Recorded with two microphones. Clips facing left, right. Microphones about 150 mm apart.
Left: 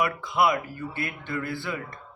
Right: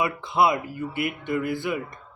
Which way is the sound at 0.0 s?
25° right (ahead or behind).